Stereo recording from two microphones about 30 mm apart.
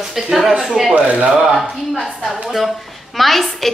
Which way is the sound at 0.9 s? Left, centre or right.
Right.